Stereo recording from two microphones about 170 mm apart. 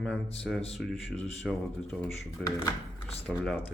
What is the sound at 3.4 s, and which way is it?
Speech, 5° left (ahead or behind).